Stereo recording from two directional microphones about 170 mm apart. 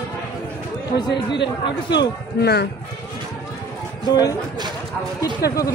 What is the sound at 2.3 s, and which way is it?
Speech, 70° left (ahead or behind).